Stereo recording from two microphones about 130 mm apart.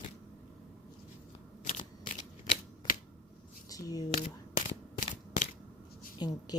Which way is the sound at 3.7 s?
30° left (ahead or behind).